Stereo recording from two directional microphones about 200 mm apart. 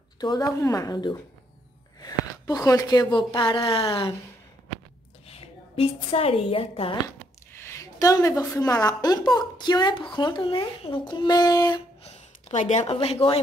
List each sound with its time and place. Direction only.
0.2 s speech: 20° left (ahead or behind)
5.3 s a woman's voice: 30° left (ahead or behind)
7.5 s a woman's voice: 15° left (ahead or behind)
12.0 s speech: 30° left (ahead or behind)